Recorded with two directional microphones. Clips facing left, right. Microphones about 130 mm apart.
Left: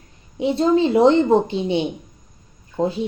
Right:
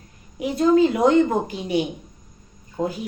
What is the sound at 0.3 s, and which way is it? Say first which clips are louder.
Speech: even; 25° left (ahead or behind).